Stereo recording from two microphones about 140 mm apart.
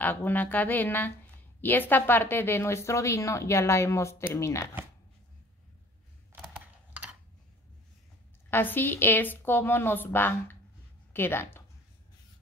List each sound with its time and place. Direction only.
0.0 s a woman's voice: 15° left (ahead or behind)
8.5 s a woman's voice: 15° left (ahead or behind)